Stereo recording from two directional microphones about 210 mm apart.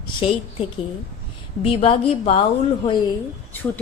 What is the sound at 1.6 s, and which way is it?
Speech, 30° left (ahead or behind).